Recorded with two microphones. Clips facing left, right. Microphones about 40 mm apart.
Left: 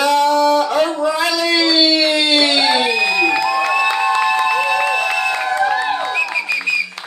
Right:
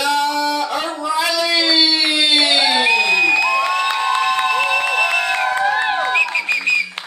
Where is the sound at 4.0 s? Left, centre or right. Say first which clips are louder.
Left 2 dB; right.